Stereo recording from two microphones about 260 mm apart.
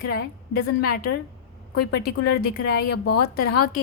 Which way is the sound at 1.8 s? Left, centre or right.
Left.